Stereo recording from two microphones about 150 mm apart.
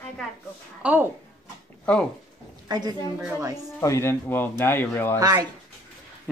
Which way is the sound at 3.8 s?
20° left (ahead or behind).